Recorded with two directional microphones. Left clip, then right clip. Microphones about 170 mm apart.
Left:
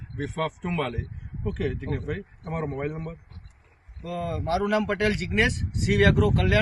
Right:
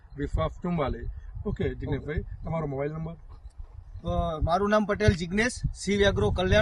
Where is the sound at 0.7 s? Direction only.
5° left (ahead or behind).